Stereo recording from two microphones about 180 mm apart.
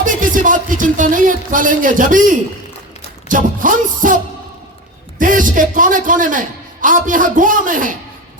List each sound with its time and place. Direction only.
0.0 s speech: 45° right (ahead or behind)
5.2 s speech: 50° right (ahead or behind)